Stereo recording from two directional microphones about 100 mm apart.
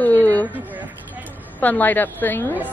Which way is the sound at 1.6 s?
15° left (ahead or behind).